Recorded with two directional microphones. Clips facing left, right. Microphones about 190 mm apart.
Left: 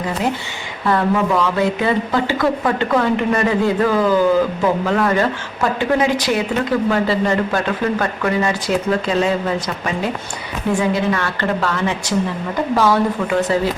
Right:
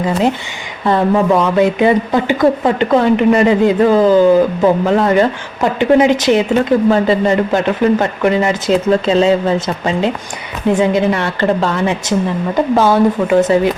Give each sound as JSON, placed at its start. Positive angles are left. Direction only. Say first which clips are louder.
{"t": 0.9, "sound": "speech", "louder": "right 5 dB", "side_deg": -25}